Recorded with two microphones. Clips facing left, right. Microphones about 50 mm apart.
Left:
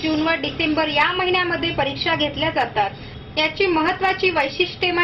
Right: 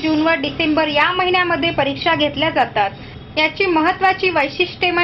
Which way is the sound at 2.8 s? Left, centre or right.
Right.